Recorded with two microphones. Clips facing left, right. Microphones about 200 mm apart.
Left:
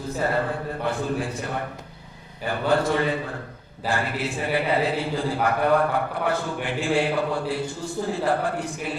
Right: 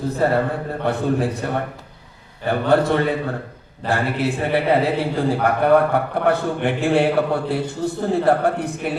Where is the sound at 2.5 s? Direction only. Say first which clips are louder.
Right 5 dB; 60° right (ahead or behind).